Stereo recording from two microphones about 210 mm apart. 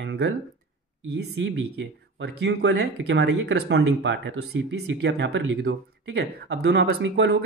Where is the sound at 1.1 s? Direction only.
60° right (ahead or behind).